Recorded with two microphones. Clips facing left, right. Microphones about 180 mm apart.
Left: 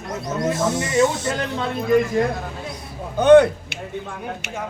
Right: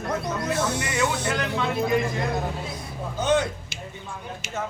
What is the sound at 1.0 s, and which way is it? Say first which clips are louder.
Speech: left 6 dB; 35° left (ahead or behind).